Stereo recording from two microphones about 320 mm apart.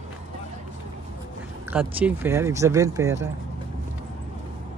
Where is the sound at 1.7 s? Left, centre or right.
Centre.